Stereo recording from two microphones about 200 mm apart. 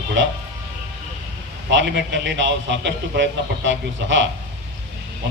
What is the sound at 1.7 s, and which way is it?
A man's voice, 65° right (ahead or behind).